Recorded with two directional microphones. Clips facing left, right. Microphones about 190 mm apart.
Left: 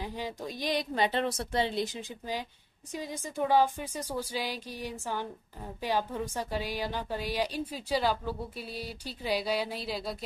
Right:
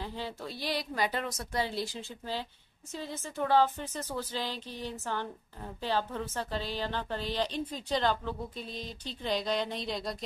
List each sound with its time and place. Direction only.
0.0 s a woman's voice: 15° left (ahead or behind)